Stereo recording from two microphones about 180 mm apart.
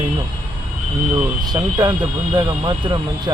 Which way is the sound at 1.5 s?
20° right (ahead or behind).